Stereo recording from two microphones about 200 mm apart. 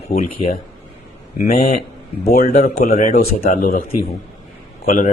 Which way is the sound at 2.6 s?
35° left (ahead or behind).